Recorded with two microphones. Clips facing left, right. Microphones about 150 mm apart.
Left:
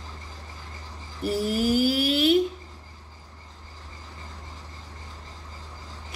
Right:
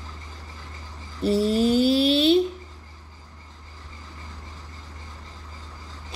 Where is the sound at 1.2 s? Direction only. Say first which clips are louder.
Right 5 dB; 25° right (ahead or behind).